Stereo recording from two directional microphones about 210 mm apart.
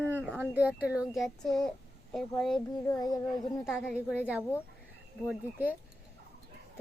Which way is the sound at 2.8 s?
20° left (ahead or behind).